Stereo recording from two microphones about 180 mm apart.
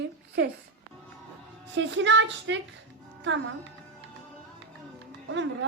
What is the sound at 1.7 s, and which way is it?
Speech, 90° right.